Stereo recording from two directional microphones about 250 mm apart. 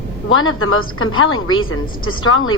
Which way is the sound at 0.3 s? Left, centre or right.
Left.